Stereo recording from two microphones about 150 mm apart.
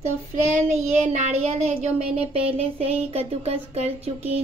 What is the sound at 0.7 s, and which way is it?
A woman's voice, 50° right (ahead or behind).